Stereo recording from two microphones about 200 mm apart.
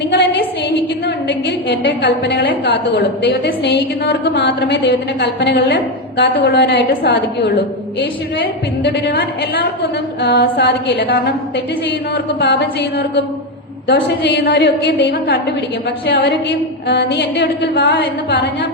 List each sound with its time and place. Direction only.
0.1 s a sound: 55° left (ahead or behind)
1.0 s a woman's voice: 60° left (ahead or behind)
8.8 s a woman's voice: 55° left (ahead or behind)